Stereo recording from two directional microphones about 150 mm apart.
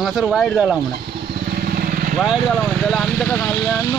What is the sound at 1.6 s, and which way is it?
Vehicle, 75° right (ahead or behind).